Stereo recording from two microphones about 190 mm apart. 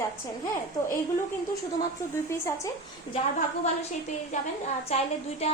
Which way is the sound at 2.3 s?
15° left (ahead or behind).